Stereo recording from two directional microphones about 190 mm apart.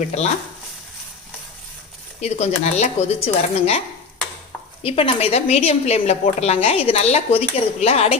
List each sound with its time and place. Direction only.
0.0 s a woman's voice: 35° left (ahead or behind)
2.2 s a woman's voice: 35° left (ahead or behind)